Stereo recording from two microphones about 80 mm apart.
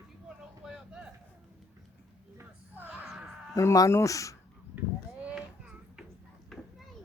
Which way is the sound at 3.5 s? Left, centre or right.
Left.